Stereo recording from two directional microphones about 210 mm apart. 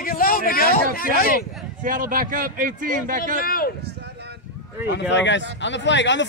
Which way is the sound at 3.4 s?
45° left (ahead or behind).